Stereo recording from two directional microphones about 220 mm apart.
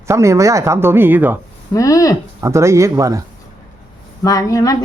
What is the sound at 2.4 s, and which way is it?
Speech, 15° right (ahead or behind).